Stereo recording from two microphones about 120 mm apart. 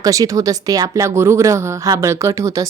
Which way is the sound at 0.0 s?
30° right (ahead or behind).